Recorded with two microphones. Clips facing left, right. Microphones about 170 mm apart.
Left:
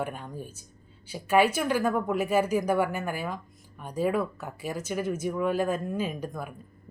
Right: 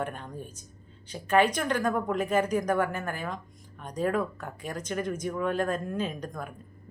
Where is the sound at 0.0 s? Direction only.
5° left (ahead or behind).